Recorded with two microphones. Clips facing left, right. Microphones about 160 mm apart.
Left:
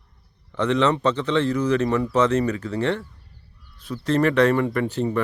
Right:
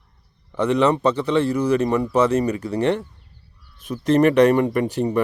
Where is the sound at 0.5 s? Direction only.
10° right (ahead or behind).